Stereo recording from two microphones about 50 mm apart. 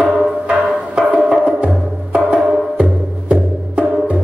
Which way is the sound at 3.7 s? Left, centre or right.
Right.